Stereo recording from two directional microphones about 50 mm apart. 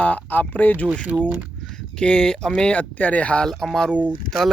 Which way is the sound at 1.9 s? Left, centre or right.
Centre.